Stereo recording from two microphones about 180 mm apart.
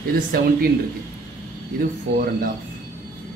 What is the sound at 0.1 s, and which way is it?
Speech, 55° right (ahead or behind).